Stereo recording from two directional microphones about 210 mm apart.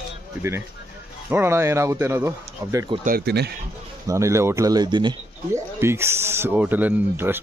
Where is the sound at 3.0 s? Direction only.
50° right (ahead or behind).